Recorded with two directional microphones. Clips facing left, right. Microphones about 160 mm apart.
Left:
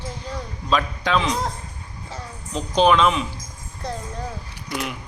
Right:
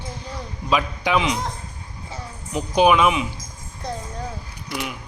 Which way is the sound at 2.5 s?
10° right (ahead or behind).